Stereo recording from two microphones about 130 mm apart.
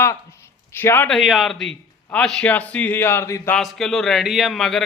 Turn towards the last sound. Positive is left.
turn(degrees=0)  # may be behind; listen again after turning